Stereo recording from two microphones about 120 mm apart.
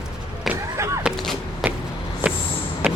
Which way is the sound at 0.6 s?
25° right (ahead or behind).